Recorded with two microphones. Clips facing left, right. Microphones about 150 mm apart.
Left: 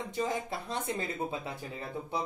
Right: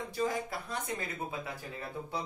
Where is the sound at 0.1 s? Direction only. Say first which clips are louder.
Even; 20° left (ahead or behind).